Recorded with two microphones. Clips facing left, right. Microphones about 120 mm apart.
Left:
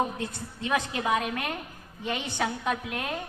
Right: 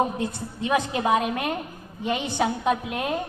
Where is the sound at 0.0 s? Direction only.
15° right (ahead or behind).